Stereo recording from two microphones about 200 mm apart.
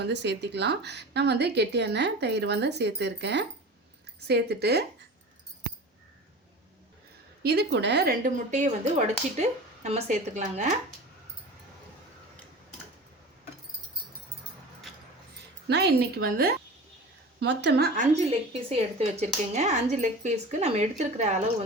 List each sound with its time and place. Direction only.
0.0 s speech: 60° right (ahead or behind)
7.4 s a woman's voice: 55° right (ahead or behind)
8.4 s a woman's voice: 35° right (ahead or behind)
15.6 s a woman's voice: 55° right (ahead or behind); by 21.5 s 35° right (ahead or behind)